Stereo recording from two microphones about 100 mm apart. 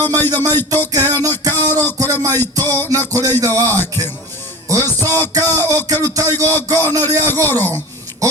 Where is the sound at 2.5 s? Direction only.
35° right (ahead or behind).